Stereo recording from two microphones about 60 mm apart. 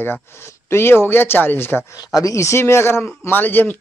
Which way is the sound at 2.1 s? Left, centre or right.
Left.